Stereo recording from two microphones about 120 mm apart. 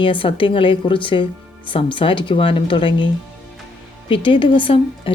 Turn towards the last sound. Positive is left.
turn(degrees=45)  # may be behind; listen again after turning